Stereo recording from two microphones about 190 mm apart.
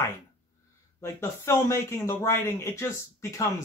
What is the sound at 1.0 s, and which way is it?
Speech, 15° left (ahead or behind).